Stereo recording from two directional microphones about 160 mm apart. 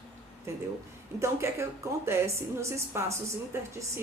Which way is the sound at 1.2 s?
15° right (ahead or behind).